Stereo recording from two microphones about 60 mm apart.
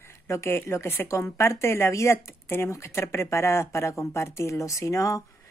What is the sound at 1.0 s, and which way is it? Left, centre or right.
Speech, left.